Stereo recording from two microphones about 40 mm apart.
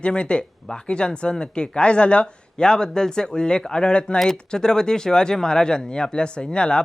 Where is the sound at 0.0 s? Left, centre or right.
Left.